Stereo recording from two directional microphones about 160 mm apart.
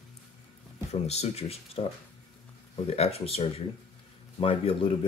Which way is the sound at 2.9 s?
40° left (ahead or behind).